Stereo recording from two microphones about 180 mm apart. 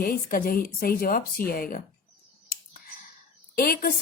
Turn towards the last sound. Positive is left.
turn(degrees=55)  # may be behind; listen again after turning